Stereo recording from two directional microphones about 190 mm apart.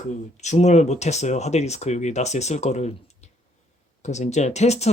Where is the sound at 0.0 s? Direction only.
40° left (ahead or behind).